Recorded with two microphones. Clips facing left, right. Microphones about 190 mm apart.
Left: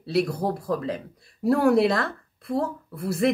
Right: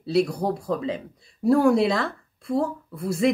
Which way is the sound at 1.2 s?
60° left (ahead or behind).